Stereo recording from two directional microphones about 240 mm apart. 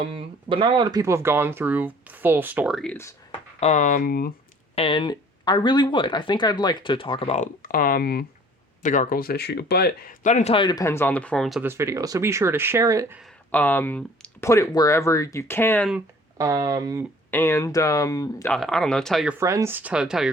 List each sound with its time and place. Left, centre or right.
0.0 s speech: right; by 3.2 s centre
3.6 s speech: left
4.7 s speech: left; by 13.2 s centre
13.5 s speech: centre
16.4 s speech: centre
17.3 s speech: centre
18.5 s speech: centre